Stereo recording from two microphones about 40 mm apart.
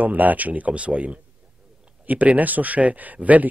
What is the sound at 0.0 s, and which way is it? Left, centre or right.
Speech, right.